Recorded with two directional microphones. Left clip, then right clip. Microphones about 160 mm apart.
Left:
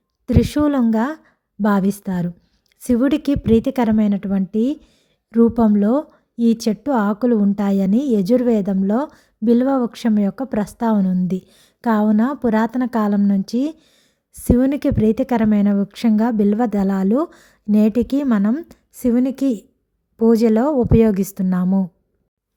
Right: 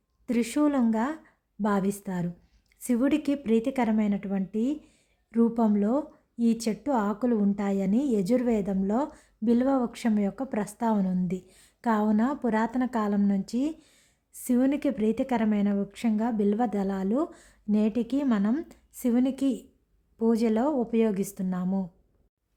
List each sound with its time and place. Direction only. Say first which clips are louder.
0.3 s a woman's voice: left 8 dB; 35° left (ahead or behind)